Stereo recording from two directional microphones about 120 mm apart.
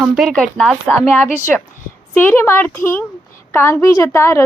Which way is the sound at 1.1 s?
20° left (ahead or behind).